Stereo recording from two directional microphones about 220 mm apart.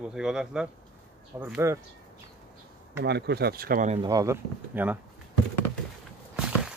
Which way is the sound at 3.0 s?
50° right (ahead or behind).